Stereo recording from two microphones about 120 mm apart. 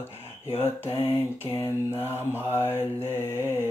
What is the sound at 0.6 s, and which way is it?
Mantra, 20° left (ahead or behind).